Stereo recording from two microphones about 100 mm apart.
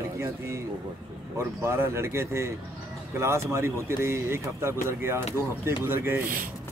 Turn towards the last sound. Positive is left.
turn(degrees=-25)  # may be behind; listen again after turning